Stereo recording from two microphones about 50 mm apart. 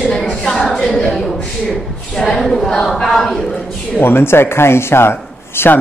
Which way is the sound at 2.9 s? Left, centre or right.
Centre.